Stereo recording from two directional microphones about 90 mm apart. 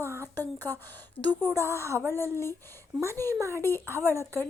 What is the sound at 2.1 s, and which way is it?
Speech, 30° right (ahead or behind).